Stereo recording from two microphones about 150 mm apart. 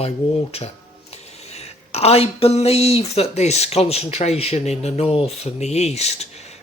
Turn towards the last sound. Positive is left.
turn(degrees=45)  # may be behind; listen again after turning